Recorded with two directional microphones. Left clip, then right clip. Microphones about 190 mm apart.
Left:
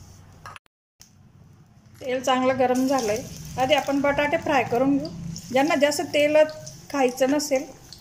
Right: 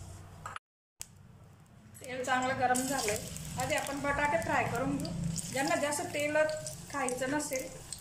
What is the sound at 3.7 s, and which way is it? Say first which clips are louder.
Speech: left 11 dB; 45° left (ahead or behind).